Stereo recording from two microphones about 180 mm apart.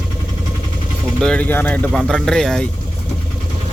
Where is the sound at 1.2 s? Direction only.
5° left (ahead or behind).